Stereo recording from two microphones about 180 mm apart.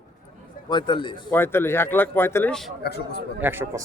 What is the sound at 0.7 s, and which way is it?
Speech, 25° left (ahead or behind).